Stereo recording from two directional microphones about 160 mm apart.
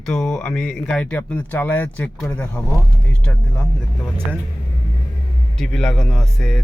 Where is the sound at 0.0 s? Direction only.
5° left (ahead or behind).